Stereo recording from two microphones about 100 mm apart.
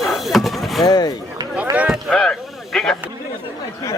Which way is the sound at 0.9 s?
40° left (ahead or behind).